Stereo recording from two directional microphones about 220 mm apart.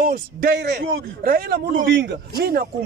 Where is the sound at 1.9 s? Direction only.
50° right (ahead or behind).